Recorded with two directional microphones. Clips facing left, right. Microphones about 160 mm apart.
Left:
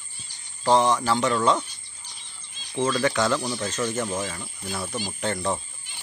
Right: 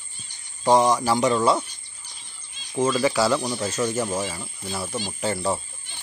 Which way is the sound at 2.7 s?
5° right (ahead or behind).